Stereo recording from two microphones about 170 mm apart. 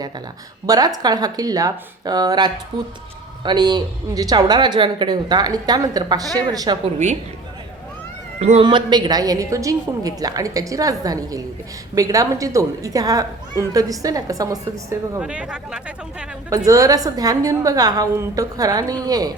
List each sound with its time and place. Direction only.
0.7 s speech: 20° right (ahead or behind)
8.4 s speech: 40° right (ahead or behind)
8.6 s speech: 25° right (ahead or behind)
15.2 s speech: 5° right (ahead or behind)
16.6 s speech: 20° right (ahead or behind)